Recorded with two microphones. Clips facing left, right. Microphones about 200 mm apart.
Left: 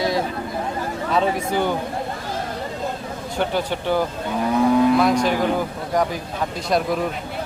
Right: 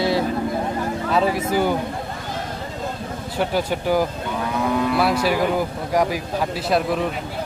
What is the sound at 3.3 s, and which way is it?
Speech, 10° right (ahead or behind).